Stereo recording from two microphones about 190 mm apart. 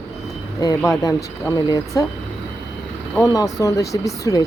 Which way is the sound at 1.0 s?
20° left (ahead or behind).